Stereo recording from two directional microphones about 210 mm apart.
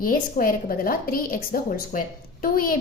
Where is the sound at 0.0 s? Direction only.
40° left (ahead or behind).